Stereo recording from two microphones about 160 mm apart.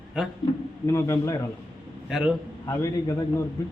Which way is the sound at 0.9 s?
20° left (ahead or behind).